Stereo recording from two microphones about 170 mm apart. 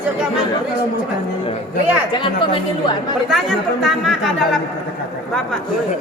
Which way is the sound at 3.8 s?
Centre (ahead or behind).